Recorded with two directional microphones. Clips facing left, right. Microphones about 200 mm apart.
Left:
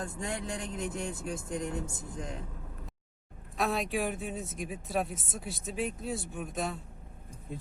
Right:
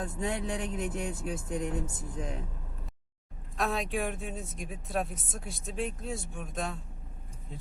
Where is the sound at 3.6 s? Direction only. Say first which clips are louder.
Left 1 dB; centre (ahead or behind).